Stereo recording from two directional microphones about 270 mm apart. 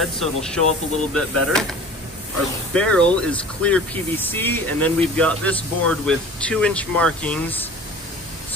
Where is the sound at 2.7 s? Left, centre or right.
Centre.